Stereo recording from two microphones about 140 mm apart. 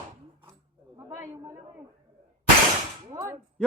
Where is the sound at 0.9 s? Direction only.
20° right (ahead or behind).